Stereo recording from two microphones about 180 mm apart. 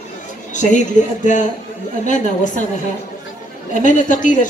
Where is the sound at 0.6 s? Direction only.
45° left (ahead or behind).